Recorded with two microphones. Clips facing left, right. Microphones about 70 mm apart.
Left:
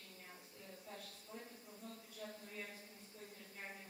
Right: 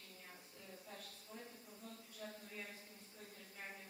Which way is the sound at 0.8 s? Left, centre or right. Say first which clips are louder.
Left 2 dB; centre.